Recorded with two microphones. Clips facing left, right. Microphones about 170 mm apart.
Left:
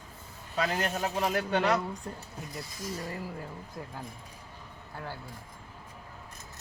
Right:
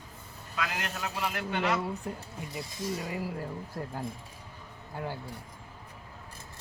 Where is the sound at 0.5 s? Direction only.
35° left (ahead or behind).